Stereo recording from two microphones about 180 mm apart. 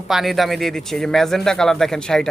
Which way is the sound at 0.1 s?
Centre (ahead or behind).